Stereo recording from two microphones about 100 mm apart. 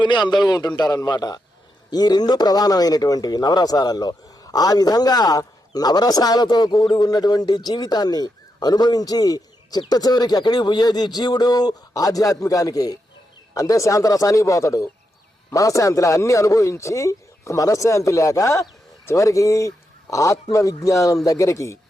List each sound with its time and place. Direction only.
0.0 s a man's voice: 50° left (ahead or behind); by 21.8 s 30° left (ahead or behind)